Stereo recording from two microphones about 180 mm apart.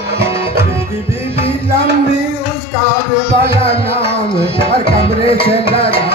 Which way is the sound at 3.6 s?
30° left (ahead or behind).